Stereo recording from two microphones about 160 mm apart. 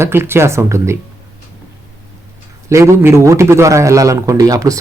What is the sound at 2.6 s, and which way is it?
A man's voice, 15° right (ahead or behind).